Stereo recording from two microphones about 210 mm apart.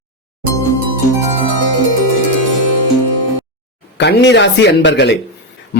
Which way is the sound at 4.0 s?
55° left (ahead or behind).